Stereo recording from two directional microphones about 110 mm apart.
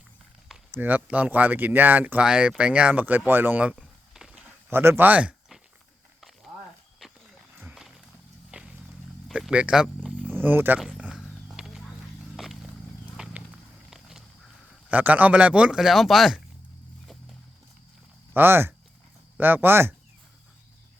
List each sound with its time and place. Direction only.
0.7 s speech: 15° right (ahead or behind)
8.4 s vehicle: 10° right (ahead or behind)
9.3 s speech: 10° right (ahead or behind)
10.8 s speech: centre (ahead or behind)
11.2 s horse: 5° right (ahead or behind)
13.1 s horse: 5° right (ahead or behind)
13.9 s walk: 5° right (ahead or behind)
14.8 s speech: 15° right (ahead or behind)
18.3 s speech: 20° right (ahead or behind)